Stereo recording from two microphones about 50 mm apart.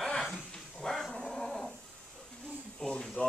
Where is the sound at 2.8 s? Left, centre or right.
Centre.